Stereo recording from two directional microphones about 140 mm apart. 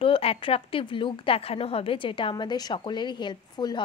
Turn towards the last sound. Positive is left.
turn(degrees=30)  # may be behind; listen again after turning